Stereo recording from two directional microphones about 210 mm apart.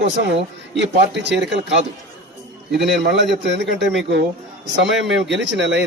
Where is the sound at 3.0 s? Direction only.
55° right (ahead or behind).